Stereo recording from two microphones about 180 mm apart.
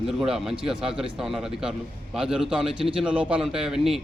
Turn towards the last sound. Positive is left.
turn(degrees=0)  # may be behind; listen again after turning